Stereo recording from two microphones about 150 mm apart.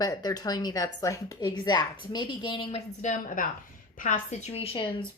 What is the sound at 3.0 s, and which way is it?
A woman's voice, 60° left (ahead or behind).